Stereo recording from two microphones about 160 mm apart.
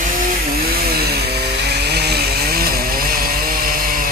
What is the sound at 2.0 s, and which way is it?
Chainsaw, 85° right.